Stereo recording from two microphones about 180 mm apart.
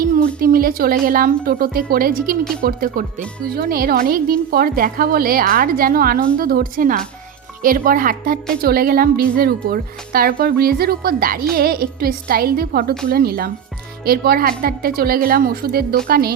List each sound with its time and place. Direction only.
0.0 s a woman's voice: 55° right (ahead or behind)